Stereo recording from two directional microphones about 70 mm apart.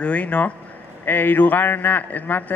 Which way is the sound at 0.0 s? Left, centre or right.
Centre.